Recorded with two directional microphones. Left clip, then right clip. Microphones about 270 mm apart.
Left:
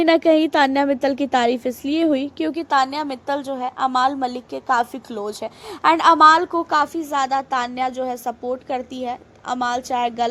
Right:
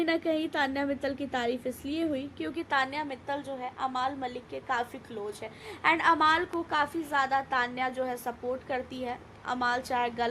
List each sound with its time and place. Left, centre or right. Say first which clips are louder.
0.0 s a woman's voice: left 14 dB; left